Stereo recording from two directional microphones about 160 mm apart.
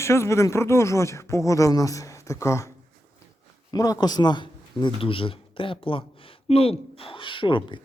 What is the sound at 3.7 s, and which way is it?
A man's voice, 25° left (ahead or behind).